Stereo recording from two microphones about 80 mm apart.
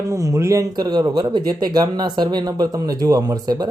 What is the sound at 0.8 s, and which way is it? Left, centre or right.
Speech, right.